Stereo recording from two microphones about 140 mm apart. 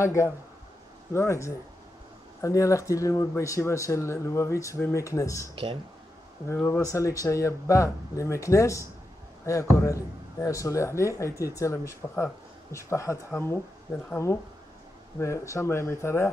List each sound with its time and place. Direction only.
0.0 s speech: 20° left (ahead or behind)
6.5 s speech: 15° left (ahead or behind)